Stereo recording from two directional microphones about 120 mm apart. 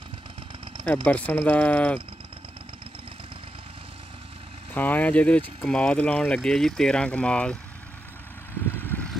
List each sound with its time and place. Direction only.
0.8 s speech: 10° left (ahead or behind)
4.7 s speech: 15° left (ahead or behind)
8.7 s vehicle: 15° left (ahead or behind)